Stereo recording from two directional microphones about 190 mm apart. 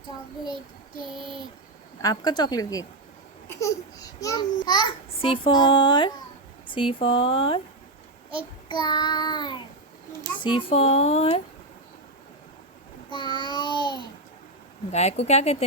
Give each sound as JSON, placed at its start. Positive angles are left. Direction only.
{"t": 1.2, "sound": "a sound", "side_deg": -25}
{"t": 2.0, "sound": "a child's voice", "side_deg": 20}
{"t": 8.7, "sound": "a child's voice", "side_deg": 25}
{"t": 13.1, "sound": "child singing", "side_deg": 25}
{"t": 14.8, "sound": "a woman's voice", "side_deg": 35}